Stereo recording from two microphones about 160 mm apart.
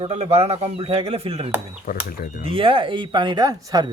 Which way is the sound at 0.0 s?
40° right (ahead or behind).